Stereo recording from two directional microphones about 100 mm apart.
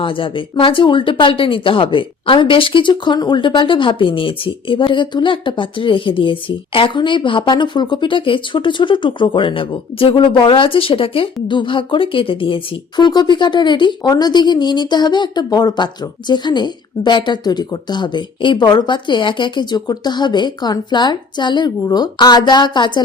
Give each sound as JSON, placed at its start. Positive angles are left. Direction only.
{"t": 0.0, "sound": "speech", "side_deg": 60}